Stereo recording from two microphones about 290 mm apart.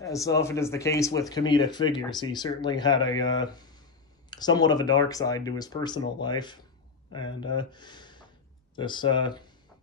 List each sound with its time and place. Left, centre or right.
0.0 s speech: centre